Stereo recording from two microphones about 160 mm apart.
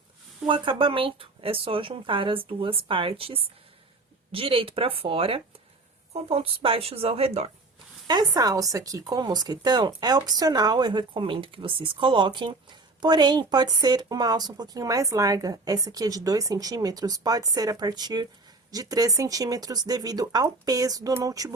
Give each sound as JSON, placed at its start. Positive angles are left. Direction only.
{"t": 0.4, "sound": "speech", "side_deg": -30}
{"t": 8.0, "sound": "speech", "side_deg": -25}